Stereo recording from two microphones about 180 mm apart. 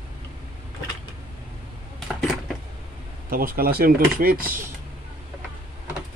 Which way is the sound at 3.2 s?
55° right (ahead or behind).